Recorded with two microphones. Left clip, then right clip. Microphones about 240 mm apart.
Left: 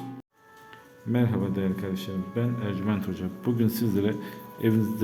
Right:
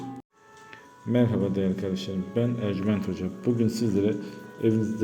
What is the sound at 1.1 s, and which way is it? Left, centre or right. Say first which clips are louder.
A man's voice: right 3 dB; centre.